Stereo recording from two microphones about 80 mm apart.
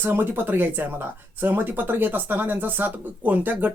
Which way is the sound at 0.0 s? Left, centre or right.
Right.